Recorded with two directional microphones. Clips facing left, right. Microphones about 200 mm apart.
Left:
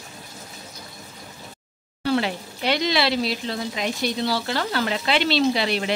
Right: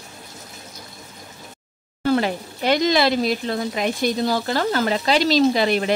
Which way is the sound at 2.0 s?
45° right (ahead or behind).